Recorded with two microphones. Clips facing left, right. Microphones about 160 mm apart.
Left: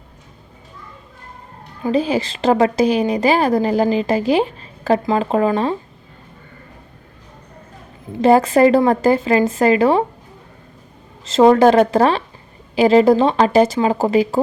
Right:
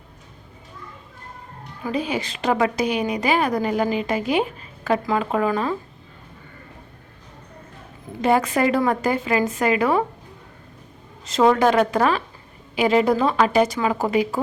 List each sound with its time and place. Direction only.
1.8 s a woman's voice: 30° left (ahead or behind)
8.2 s a woman's voice: 30° left (ahead or behind)
11.3 s a woman's voice: 30° left (ahead or behind)